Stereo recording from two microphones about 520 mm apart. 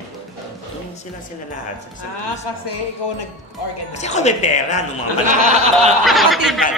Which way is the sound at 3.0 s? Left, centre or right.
Left.